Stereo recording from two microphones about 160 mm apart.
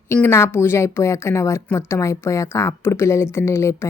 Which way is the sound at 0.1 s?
15° left (ahead or behind).